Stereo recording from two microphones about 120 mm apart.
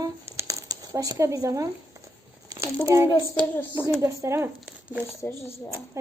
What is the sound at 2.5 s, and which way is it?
Speech, 30° right (ahead or behind).